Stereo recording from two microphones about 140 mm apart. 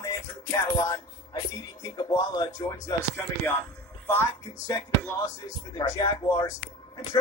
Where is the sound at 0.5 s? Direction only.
25° left (ahead or behind).